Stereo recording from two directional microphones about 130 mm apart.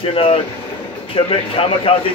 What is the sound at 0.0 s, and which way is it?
Speech, 45° left (ahead or behind).